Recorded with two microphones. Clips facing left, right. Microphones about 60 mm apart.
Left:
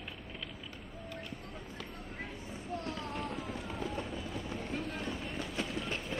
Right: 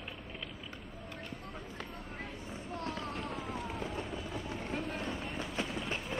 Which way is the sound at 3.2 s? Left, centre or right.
Centre.